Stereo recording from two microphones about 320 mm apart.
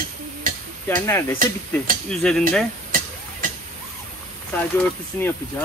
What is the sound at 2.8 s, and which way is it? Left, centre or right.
Vehicle, right.